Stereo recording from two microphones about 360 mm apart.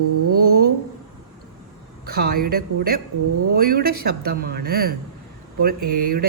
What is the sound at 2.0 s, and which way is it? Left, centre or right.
Speech, right.